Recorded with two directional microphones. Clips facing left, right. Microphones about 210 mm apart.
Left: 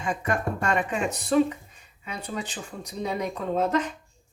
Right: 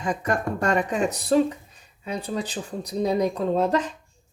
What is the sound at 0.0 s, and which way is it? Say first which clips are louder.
Speech: right 2 dB; 40° right (ahead or behind).